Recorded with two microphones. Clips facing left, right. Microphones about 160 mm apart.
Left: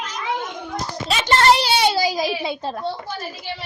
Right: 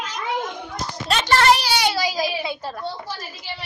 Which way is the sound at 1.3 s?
25° left (ahead or behind).